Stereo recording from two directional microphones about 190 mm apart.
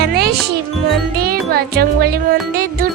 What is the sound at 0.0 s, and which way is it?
Music, 55° right (ahead or behind).